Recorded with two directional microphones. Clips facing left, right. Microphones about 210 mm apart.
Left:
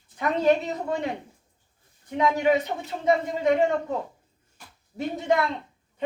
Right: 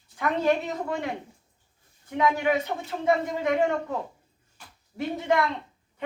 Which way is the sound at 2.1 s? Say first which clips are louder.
Left 2 dB; 20° left (ahead or behind).